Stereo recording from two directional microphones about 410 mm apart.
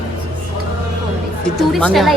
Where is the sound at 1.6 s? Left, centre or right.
Centre.